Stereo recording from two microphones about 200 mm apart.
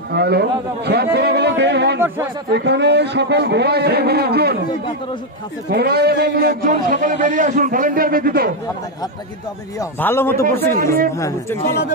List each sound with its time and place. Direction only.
0.1 s a man's voice: 55° right (ahead or behind)
2.0 s speech: 10° right (ahead or behind)
2.5 s a man's voice: 60° right (ahead or behind)
5.7 s a man's voice: 55° right (ahead or behind)
9.8 s a man's voice: 10° left (ahead or behind)
10.4 s a man's voice: 45° right (ahead or behind)
11.1 s a man's voice: 15° left (ahead or behind)